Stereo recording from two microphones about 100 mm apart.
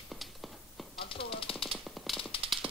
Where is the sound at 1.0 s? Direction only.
65° left (ahead or behind).